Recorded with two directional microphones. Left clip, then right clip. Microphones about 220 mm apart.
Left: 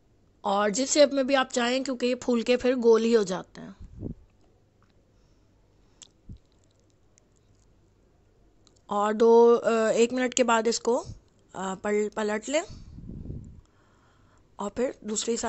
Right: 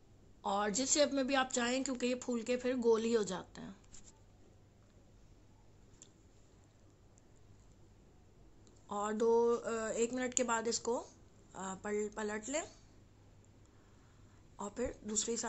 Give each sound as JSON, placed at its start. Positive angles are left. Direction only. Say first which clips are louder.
{"t": 0.4, "sound": "speech", "louder": "left 10 dB", "side_deg": 35}
{"t": 8.6, "sound": "speech", "louder": "left 13 dB", "side_deg": 40}
{"t": 14.6, "sound": "speech", "louder": "left 11 dB", "side_deg": 35}